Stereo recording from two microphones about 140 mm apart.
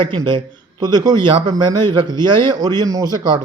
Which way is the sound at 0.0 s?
35° right (ahead or behind).